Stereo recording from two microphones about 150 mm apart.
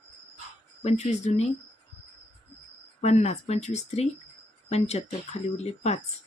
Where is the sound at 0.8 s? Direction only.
50° left (ahead or behind).